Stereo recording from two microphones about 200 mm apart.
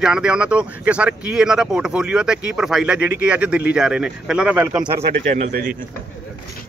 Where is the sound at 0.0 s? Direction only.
5° right (ahead or behind).